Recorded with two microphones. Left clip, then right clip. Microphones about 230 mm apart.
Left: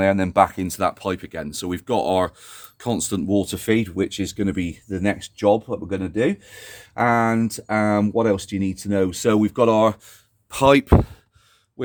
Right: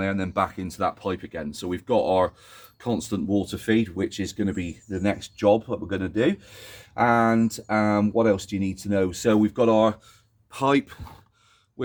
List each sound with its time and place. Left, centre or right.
0.0 s speech: left